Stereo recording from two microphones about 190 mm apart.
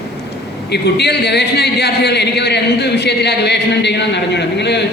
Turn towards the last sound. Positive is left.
turn(degrees=65)  # may be behind; listen again after turning